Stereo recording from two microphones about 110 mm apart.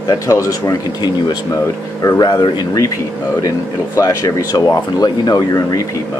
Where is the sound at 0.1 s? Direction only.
30° left (ahead or behind).